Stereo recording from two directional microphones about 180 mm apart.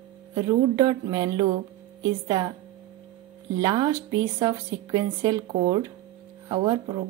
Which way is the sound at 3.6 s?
20° right (ahead or behind).